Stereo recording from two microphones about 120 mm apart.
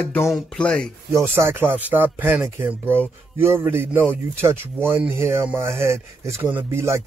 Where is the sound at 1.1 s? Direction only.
20° right (ahead or behind).